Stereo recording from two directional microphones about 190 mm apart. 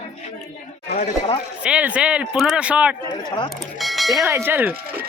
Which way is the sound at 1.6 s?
5° right (ahead or behind).